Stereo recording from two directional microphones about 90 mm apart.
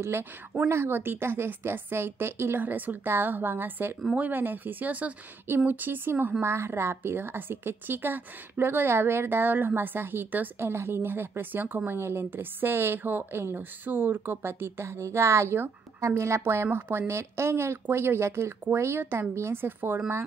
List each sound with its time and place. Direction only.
0.0 s a woman's voice: 25° right (ahead or behind)